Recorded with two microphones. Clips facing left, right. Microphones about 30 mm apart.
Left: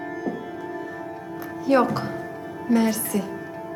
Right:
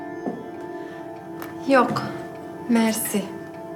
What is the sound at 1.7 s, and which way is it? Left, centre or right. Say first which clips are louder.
Speech: right 1 dB; right.